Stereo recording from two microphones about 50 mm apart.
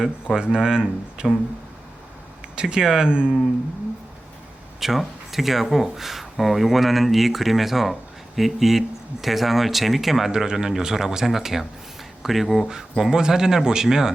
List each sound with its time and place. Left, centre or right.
0.0 s speech: centre
2.6 s speech: centre
4.8 s speech: centre